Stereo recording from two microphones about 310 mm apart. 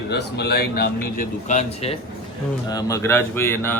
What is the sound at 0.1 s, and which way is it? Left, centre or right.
A man's voice, left.